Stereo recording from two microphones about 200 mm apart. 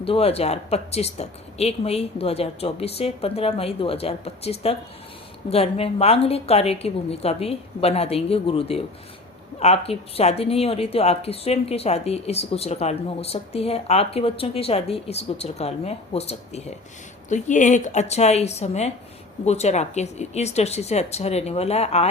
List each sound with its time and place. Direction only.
0.0 s speech: 30° left (ahead or behind)